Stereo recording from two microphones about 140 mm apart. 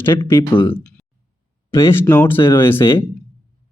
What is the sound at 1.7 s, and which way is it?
Speech, 20° left (ahead or behind).